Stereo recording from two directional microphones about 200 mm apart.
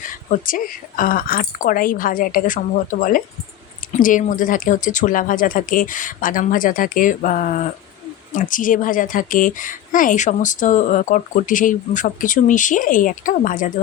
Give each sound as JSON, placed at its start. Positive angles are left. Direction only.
{"t": 0.0, "sound": "speech", "side_deg": 45}